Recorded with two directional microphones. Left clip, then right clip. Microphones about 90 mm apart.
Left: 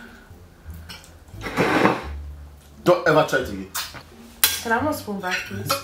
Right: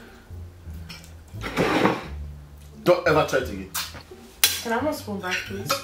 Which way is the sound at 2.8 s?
Centre (ahead or behind).